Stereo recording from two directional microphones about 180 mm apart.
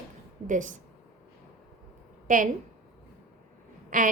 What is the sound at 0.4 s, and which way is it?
Speech, 45° right (ahead or behind).